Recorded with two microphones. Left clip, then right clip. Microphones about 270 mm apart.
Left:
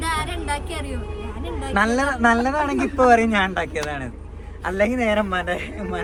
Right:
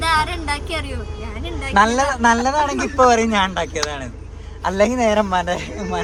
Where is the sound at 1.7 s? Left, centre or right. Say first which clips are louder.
Right 5 dB; centre.